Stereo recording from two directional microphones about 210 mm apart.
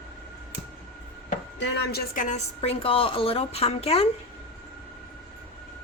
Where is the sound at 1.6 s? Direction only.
55° left (ahead or behind).